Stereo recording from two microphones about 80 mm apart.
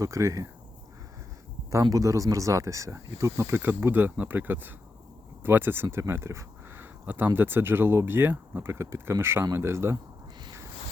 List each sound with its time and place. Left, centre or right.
0.0 s speech: right
1.7 s speech: right